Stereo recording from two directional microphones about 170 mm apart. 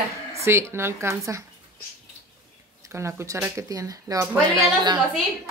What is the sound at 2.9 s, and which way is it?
Speech, 15° right (ahead or behind).